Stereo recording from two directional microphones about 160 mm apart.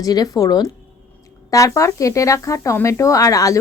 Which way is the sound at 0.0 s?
25° left (ahead or behind).